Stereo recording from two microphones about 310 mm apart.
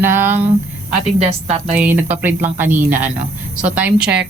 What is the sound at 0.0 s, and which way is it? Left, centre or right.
Speech, centre.